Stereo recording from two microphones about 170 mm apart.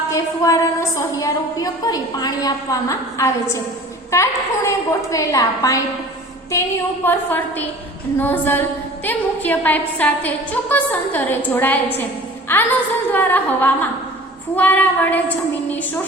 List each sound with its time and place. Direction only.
0.1 s a woman's voice: 20° left (ahead or behind)